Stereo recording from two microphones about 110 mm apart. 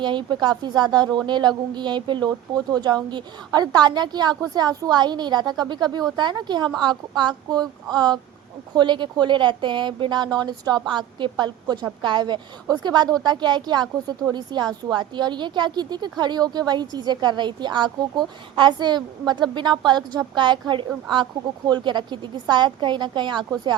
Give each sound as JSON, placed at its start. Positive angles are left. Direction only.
{"t": 0.0, "sound": "a woman's voice", "side_deg": -45}